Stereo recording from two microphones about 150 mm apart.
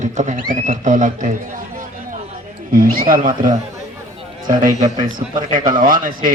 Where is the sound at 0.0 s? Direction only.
55° right (ahead or behind).